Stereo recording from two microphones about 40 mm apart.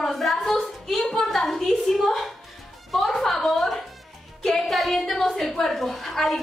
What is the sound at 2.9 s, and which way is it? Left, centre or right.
Music, centre.